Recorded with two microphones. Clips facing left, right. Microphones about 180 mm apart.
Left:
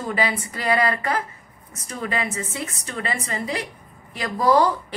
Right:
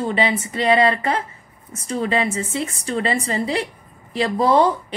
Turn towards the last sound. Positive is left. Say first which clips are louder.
# right 2 dB
turn(degrees=-25)  # may be behind; listen again after turning